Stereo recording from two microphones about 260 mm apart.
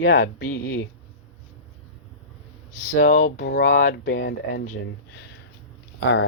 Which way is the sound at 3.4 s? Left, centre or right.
Left.